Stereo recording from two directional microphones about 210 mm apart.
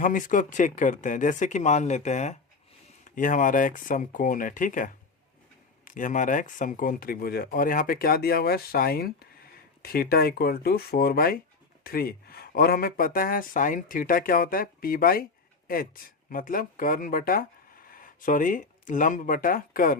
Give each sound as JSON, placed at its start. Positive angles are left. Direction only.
{"t": 0.0, "sound": "speech", "side_deg": 40}